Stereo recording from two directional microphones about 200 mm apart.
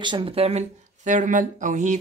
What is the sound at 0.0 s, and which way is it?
A woman's voice, 25° right (ahead or behind).